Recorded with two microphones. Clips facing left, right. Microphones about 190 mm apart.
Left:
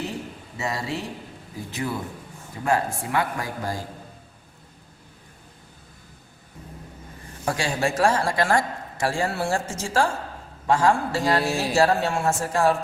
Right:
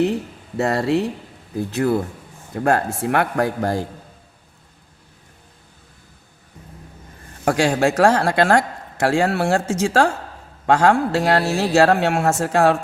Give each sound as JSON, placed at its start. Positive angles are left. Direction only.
{"t": 0.5, "sound": "speech", "side_deg": -60}
{"t": 7.4, "sound": "speech", "side_deg": -70}